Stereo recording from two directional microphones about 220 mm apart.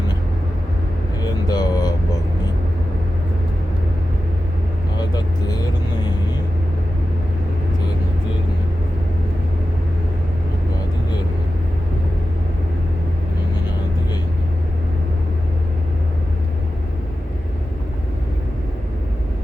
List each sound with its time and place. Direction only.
1.2 s vehicle: 20° left (ahead or behind)
4.9 s vehicle: 20° left (ahead or behind)